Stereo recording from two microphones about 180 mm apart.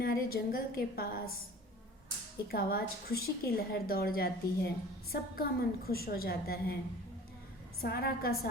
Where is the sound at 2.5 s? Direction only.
55° left (ahead or behind).